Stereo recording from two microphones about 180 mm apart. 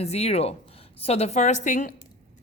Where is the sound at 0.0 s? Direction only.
35° left (ahead or behind).